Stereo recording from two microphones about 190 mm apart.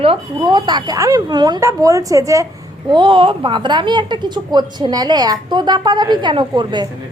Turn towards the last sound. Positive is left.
turn(degrees=-25)  # may be behind; listen again after turning